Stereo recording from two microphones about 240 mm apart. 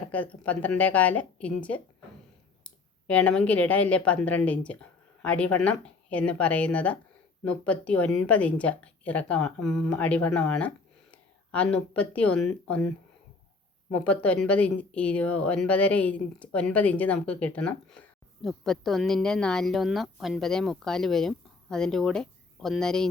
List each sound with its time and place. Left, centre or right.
0.4 s speech: centre
14.0 s speech: centre